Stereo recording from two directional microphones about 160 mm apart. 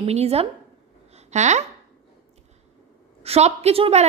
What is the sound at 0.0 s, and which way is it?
Speech, 40° right (ahead or behind).